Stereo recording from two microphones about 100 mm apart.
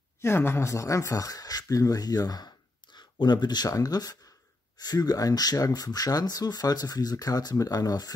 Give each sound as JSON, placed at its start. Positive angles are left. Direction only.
{"t": 0.2, "sound": "speech", "side_deg": 25}